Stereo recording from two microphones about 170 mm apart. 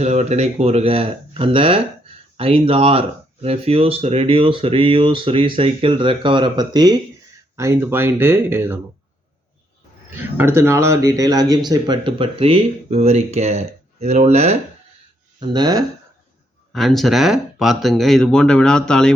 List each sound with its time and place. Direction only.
0.0 s speech: 40° right (ahead or behind); by 8.8 s 15° right (ahead or behind)
10.3 s speech: 15° right (ahead or behind); by 14.5 s 40° right (ahead or behind)
15.4 s speech: 25° right (ahead or behind)
16.7 s speech: centre (ahead or behind)